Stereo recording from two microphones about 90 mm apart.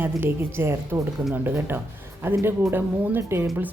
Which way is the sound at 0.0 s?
25° right (ahead or behind).